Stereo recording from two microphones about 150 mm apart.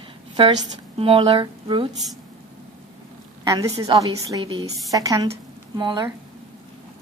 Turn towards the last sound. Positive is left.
turn(degrees=-30)  # may be behind; listen again after turning